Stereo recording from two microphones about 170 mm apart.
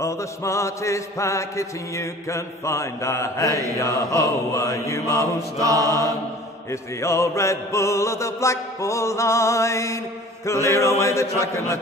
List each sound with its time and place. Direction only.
0.0 s mantra: 15° left (ahead or behind)
5.6 s mantra: 20° right (ahead or behind)
6.7 s mantra: 15° left (ahead or behind)